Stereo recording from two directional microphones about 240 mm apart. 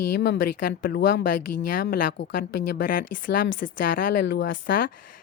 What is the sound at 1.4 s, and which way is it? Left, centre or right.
Speech, left.